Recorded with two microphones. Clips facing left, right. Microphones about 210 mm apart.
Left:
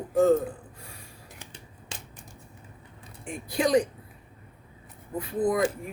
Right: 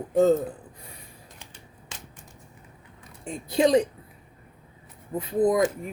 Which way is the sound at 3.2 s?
25° right (ahead or behind).